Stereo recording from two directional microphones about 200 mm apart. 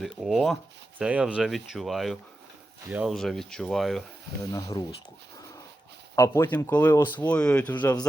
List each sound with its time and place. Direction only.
0.0 s speech: centre (ahead or behind)
4.5 s speech: 15° left (ahead or behind)
6.1 s speech: 15° left (ahead or behind)